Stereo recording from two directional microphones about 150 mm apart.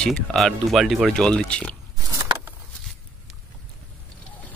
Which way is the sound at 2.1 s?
25° right (ahead or behind).